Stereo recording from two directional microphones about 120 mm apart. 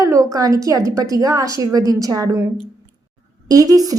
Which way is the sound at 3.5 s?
30° right (ahead or behind).